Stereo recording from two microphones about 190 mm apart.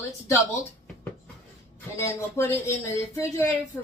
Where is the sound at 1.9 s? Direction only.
15° left (ahead or behind).